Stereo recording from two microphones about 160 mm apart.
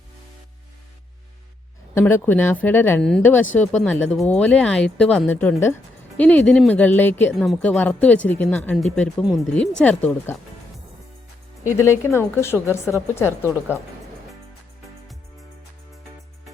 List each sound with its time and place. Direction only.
2.0 s speech: 15° left (ahead or behind)
7.3 s speech: centre (ahead or behind)
11.8 s speech: 15° left (ahead or behind)
13.4 s a woman's voice: 10° right (ahead or behind)